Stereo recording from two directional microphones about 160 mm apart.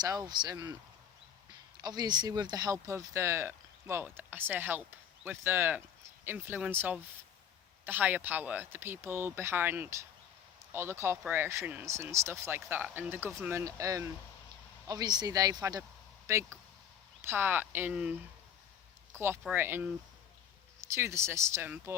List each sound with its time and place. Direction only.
0.0 s speech: 25° right (ahead or behind)
1.8 s speech: 25° right (ahead or behind); by 18.1 s 10° right (ahead or behind)
19.1 s speech: 15° right (ahead or behind)
20.9 s speech: 15° right (ahead or behind)